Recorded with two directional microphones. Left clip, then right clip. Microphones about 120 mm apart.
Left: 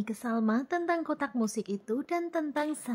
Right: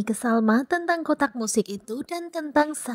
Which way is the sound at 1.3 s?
65° right (ahead or behind).